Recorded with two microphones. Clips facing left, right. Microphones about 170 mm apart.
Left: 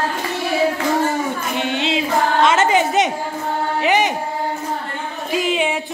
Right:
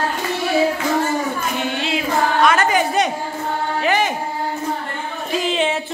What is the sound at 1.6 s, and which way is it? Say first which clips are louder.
Music: left 4 dB; 20° left (ahead or behind).